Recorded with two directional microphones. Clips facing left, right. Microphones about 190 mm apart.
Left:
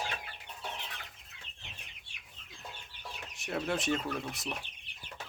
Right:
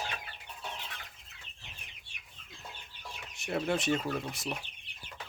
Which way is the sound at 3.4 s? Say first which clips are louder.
Right 2 dB; centre (ahead or behind).